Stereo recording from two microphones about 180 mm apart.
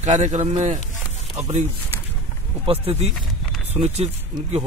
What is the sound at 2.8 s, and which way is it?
Speech, 35° right (ahead or behind).